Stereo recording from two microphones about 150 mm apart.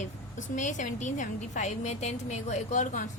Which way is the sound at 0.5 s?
55° left (ahead or behind).